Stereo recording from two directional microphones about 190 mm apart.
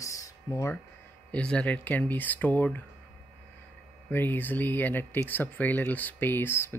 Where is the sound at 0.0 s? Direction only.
15° left (ahead or behind).